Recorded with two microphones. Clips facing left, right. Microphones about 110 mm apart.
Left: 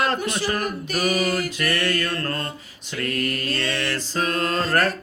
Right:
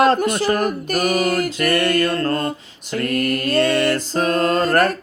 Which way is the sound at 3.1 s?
55° right (ahead or behind).